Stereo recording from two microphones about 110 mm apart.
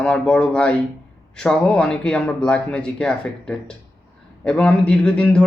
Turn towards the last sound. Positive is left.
turn(degrees=10)  # may be behind; listen again after turning